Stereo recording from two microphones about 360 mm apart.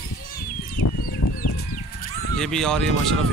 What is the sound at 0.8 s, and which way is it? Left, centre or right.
Fowl, left.